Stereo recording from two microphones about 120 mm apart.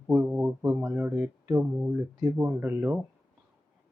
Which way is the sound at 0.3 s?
5° right (ahead or behind).